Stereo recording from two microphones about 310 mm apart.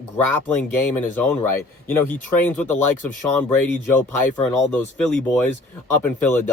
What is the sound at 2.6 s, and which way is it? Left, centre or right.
Speech, centre.